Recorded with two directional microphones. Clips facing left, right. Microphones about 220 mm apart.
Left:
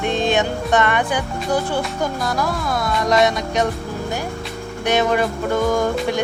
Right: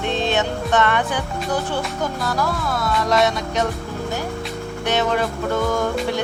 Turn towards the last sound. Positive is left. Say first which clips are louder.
# left 2 dB
turn(degrees=15)  # may be behind; listen again after turning